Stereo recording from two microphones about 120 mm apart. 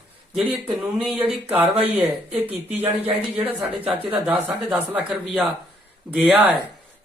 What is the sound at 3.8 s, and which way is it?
A man's voice, 15° right (ahead or behind).